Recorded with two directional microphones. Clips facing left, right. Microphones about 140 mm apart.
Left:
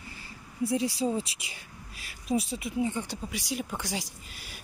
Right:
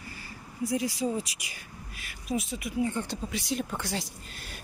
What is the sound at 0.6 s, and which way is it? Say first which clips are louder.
Speech: left 1 dB; 30° left (ahead or behind).